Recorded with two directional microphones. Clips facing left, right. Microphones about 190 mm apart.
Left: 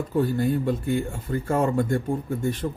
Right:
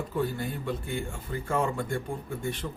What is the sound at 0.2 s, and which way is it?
Speech, 40° left (ahead or behind).